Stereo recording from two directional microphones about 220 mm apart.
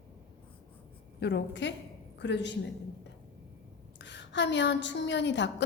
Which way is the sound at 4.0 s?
55° left (ahead or behind).